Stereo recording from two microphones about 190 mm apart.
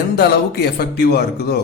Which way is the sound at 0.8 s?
55° left (ahead or behind).